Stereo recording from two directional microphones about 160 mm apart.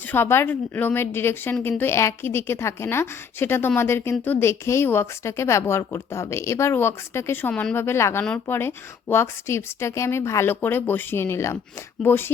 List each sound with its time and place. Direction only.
0.1 s speech: 15° left (ahead or behind)